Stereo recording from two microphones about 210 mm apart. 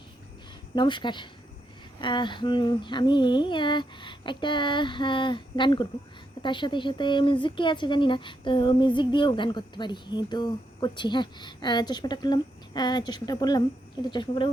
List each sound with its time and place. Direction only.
0.8 s speech: 20° left (ahead or behind)